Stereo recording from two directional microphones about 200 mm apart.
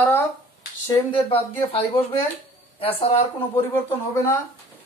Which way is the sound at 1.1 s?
30° left (ahead or behind).